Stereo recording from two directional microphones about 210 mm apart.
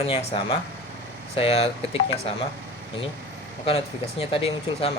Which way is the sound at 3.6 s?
25° left (ahead or behind).